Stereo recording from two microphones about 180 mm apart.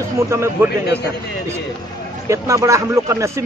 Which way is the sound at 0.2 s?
15° right (ahead or behind).